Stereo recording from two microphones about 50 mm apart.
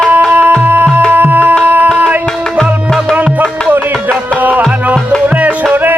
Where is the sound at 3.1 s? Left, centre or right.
Right.